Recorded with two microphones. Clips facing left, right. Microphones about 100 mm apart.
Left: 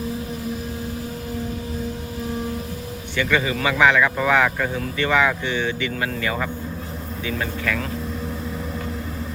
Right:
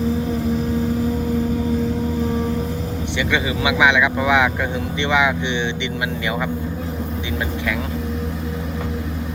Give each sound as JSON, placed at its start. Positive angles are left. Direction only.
{"t": 3.2, "sound": "speech", "side_deg": -15}